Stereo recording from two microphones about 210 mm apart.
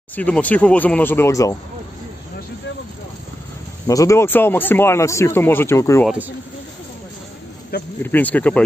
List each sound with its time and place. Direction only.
0.1 s speech: 5° left (ahead or behind)
3.8 s speech: 15° left (ahead or behind)
6.0 s speech: 5° right (ahead or behind)
8.0 s speech: 10° left (ahead or behind)